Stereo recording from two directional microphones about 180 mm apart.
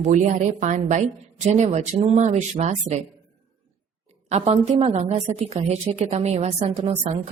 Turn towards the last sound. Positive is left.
turn(degrees=-30)  # may be behind; listen again after turning